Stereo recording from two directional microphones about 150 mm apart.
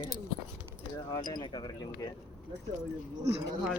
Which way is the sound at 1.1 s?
25° left (ahead or behind).